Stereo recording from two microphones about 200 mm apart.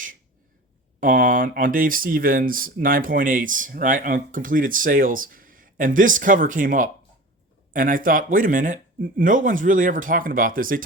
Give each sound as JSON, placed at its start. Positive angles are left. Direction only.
{"t": 0.9, "sound": "speech", "side_deg": -40}